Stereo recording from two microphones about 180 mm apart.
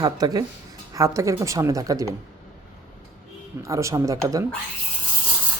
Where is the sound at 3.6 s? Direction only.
15° right (ahead or behind).